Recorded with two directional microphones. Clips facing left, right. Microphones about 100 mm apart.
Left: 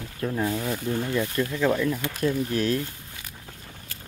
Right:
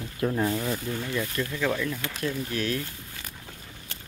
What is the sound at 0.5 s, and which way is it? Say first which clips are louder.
Speech: left 2 dB; 10° left (ahead or behind).